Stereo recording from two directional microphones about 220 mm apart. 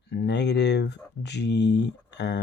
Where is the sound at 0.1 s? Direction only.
50° left (ahead or behind).